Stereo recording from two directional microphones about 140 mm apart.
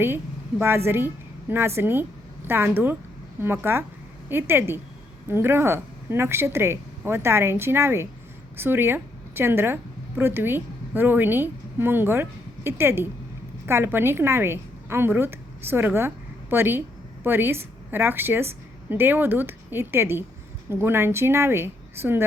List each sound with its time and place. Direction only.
0.9 s a woman's voice: 15° right (ahead or behind)